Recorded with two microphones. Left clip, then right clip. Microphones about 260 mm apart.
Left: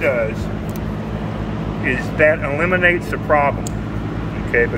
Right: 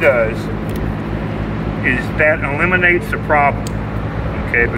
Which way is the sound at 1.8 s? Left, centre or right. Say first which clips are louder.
Right 1 dB; centre.